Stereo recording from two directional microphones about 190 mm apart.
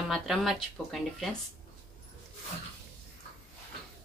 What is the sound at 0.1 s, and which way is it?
Speech, centre (ahead or behind).